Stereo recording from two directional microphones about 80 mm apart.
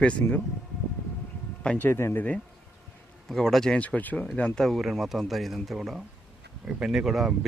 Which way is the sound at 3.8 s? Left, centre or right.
Centre.